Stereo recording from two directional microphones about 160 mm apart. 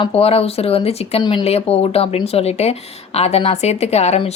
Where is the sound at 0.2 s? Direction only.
40° left (ahead or behind).